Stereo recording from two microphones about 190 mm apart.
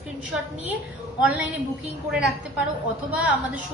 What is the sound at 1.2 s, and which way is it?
A woman's voice, 10° right (ahead or behind).